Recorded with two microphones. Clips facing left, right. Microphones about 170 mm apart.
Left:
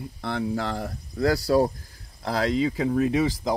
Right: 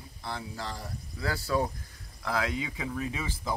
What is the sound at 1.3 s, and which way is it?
Speech, 40° left (ahead or behind).